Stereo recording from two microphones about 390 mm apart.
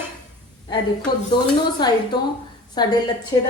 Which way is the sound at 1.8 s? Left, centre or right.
Centre.